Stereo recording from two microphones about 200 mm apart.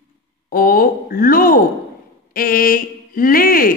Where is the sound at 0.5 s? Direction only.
45° left (ahead or behind).